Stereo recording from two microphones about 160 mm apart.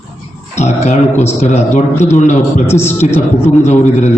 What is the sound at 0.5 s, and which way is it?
A man's voice, 45° left (ahead or behind).